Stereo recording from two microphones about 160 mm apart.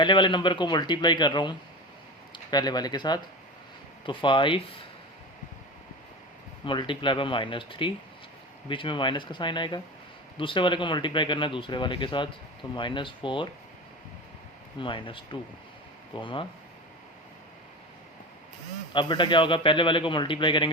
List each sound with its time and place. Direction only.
0.0 s speech: 30° left (ahead or behind)
6.7 s speech: 30° left (ahead or behind)
14.8 s speech: 30° left (ahead or behind)
18.9 s speech: 30° left (ahead or behind)